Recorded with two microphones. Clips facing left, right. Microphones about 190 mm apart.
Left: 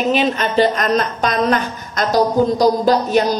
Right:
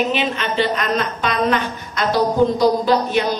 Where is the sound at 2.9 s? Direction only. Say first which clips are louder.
Left 3 dB; 40° left (ahead or behind).